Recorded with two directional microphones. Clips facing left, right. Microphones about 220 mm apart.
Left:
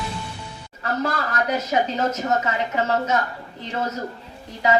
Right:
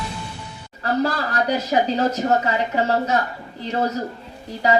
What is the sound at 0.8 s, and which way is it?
Speech, 30° right (ahead or behind).